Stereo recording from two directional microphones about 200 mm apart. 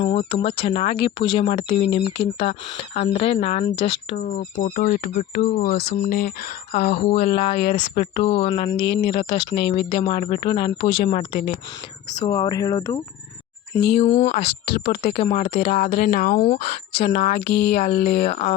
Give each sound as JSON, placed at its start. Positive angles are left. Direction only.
{"t": 0.0, "sound": "speech", "side_deg": 25}
{"t": 4.2, "sound": "speech", "side_deg": 40}
{"t": 5.8, "sound": "speech", "side_deg": 50}
{"t": 12.1, "sound": "speech", "side_deg": 20}
{"t": 14.0, "sound": "speech", "side_deg": 30}
{"t": 15.6, "sound": "speech", "side_deg": 45}
{"t": 18.2, "sound": "speech", "side_deg": 30}